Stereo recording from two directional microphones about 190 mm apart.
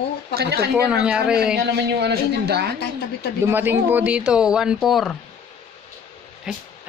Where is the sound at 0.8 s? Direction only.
5° right (ahead or behind).